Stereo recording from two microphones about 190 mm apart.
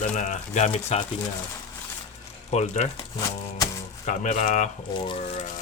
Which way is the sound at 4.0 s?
40° left (ahead or behind).